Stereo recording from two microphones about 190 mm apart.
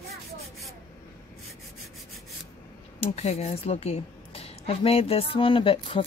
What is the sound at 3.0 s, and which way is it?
A woman's voice, 35° left (ahead or behind).